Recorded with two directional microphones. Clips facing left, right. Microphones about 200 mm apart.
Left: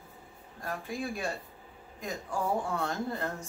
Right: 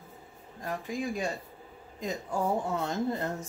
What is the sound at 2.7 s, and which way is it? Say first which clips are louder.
Speech: right 3 dB; 20° right (ahead or behind).